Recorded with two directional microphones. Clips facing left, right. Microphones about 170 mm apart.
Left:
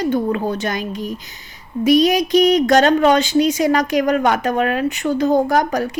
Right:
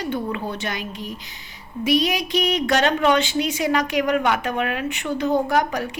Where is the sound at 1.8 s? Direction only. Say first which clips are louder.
Left 7 dB; 40° left (ahead or behind).